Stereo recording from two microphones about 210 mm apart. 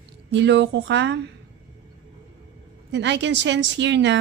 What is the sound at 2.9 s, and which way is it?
A woman's voice, 55° right (ahead or behind).